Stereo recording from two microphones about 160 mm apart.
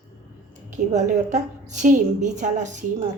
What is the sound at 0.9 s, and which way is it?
A woman's voice, 50° right (ahead or behind).